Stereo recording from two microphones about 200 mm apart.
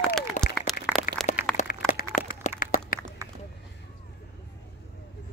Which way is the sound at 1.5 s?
40° left (ahead or behind).